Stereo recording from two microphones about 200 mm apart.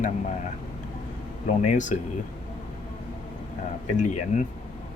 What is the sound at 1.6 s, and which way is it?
Speech, 35° left (ahead or behind).